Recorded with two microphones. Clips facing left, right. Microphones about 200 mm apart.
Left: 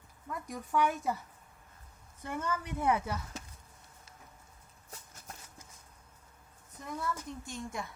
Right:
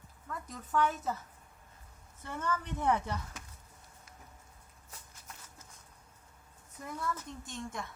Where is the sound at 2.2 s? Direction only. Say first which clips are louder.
Even; 10° left (ahead or behind).